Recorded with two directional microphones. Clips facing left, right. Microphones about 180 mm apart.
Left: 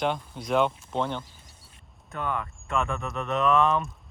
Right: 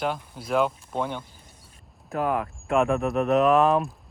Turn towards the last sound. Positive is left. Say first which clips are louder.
# right 4 dB
turn(degrees=0)  # may be behind; listen again after turning